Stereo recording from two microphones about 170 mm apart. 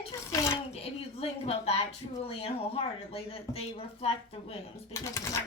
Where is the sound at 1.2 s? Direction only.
35° left (ahead or behind).